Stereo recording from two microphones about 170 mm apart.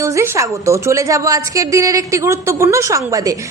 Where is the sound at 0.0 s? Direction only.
15° right (ahead or behind).